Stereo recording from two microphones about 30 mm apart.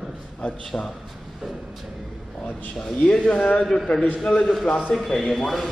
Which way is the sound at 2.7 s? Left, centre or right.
Left.